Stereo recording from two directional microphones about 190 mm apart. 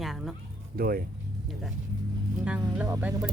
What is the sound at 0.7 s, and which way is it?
Speech, 50° right (ahead or behind).